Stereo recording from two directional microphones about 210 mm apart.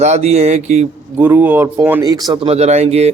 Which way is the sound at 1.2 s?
10° right (ahead or behind).